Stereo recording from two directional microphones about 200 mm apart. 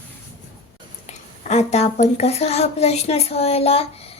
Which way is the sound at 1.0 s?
35° left (ahead or behind).